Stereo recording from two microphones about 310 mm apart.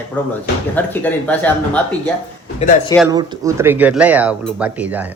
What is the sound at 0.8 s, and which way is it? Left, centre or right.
Speech, centre.